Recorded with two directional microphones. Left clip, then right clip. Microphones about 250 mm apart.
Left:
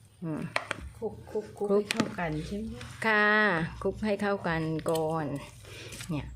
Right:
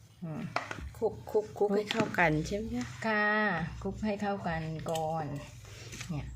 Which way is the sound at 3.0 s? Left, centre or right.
Left.